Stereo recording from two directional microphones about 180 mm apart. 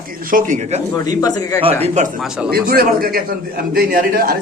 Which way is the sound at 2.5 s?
55° right (ahead or behind).